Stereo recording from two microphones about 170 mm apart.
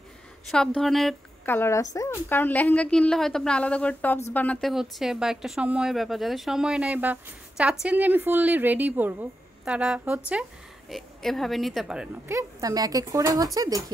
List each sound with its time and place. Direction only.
0.5 s speech: 5° left (ahead or behind)
1.4 s a woman's voice: 15° left (ahead or behind); by 12.1 s 5° right (ahead or behind)
12.3 s speech: 20° right (ahead or behind)